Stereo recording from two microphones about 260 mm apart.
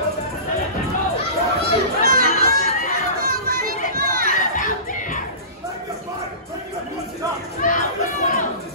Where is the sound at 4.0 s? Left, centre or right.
Right.